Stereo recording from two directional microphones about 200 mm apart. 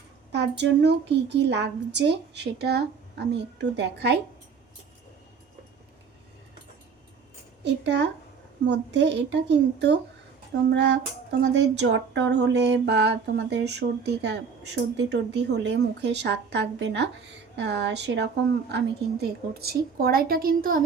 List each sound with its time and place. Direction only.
0.3 s a woman's voice: 60° right (ahead or behind)
7.6 s a woman's voice: 60° right (ahead or behind)